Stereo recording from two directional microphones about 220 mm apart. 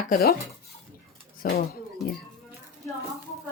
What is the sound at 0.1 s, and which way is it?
Dishes, 45° left (ahead or behind).